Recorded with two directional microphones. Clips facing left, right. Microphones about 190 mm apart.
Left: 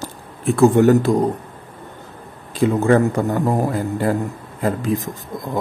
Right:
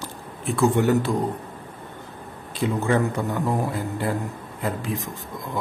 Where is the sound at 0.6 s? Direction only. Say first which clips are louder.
Left 7 dB; 45° left (ahead or behind).